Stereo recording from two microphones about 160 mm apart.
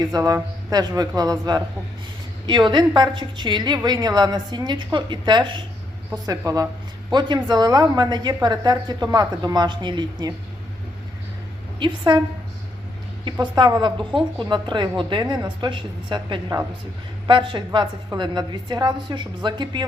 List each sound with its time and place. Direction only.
0.0 s a woman's voice: 25° right (ahead or behind)
11.8 s a woman's voice: 30° right (ahead or behind)
13.4 s a woman's voice: 25° right (ahead or behind)